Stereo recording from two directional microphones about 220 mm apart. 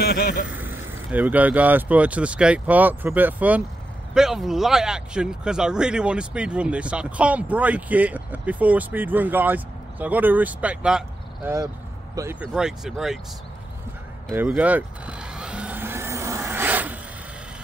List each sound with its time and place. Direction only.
0.0 s speech: 45° left (ahead or behind)
0.5 s speech: 10° right (ahead or behind)
14.3 s vehicle: 10° right (ahead or behind)